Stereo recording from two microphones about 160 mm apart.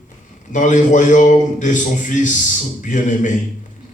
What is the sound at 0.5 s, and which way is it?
A man's voice, 50° left (ahead or behind).